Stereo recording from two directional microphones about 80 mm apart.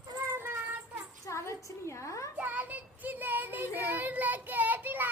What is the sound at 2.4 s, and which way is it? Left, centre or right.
Child singing, right.